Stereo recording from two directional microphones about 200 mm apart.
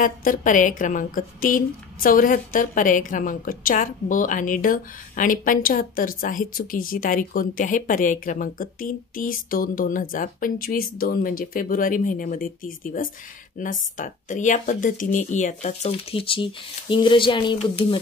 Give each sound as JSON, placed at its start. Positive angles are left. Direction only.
{"t": 0.0, "sound": "a woman's voice", "side_deg": 45}